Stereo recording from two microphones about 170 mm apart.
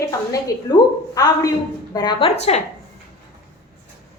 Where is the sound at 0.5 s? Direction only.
20° left (ahead or behind); by 2.6 s 40° left (ahead or behind).